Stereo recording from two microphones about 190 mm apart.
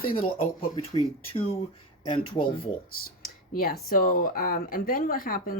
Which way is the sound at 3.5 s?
50° left (ahead or behind).